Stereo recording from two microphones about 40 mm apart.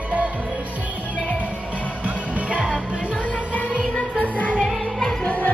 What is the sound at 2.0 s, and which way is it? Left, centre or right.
Music, right.